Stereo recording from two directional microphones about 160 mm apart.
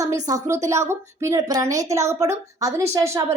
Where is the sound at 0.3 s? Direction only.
20° right (ahead or behind).